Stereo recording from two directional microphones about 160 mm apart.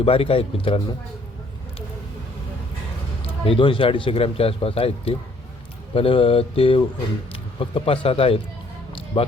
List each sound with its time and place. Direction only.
0.0 s speech: 35° left (ahead or behind)
3.4 s speech: 35° left (ahead or behind)
8.9 s music: 35° left (ahead or behind)